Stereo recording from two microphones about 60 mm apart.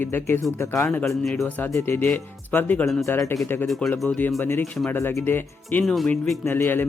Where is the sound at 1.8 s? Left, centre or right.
Left.